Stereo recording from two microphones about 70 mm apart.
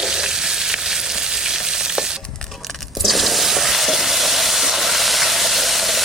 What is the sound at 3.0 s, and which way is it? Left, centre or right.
Water, centre.